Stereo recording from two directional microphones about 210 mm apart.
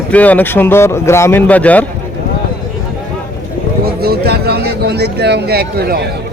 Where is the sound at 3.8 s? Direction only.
45° right (ahead or behind).